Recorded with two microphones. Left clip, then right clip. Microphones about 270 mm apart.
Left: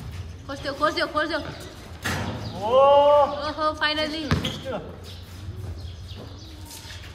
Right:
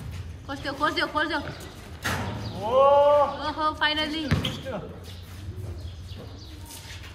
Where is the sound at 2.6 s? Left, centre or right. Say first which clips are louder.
Left 2 dB; left.